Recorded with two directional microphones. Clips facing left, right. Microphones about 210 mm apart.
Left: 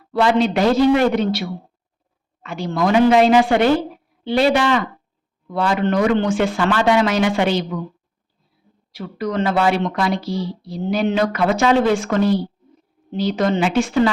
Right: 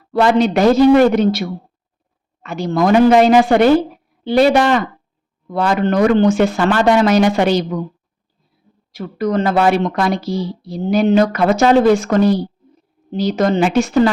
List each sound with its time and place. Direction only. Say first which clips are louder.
0.1 s a woman's voice: right 3 dB; 45° right (ahead or behind)
8.9 s a woman's voice: right 5 dB; 45° right (ahead or behind)